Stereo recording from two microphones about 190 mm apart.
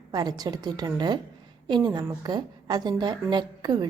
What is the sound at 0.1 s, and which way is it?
A woman's voice, 20° right (ahead or behind).